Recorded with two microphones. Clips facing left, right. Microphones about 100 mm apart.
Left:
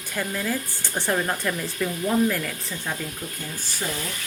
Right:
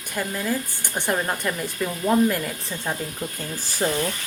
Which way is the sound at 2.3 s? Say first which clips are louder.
Right 1 dB; 25° right (ahead or behind).